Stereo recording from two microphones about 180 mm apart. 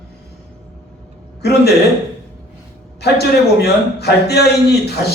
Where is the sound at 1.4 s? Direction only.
65° left (ahead or behind).